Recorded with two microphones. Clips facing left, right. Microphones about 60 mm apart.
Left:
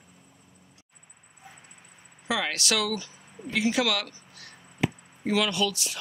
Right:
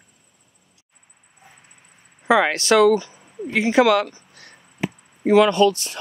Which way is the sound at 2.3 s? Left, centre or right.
Right.